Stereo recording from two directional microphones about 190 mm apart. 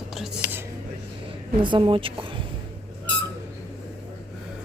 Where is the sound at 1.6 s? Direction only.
25° right (ahead or behind).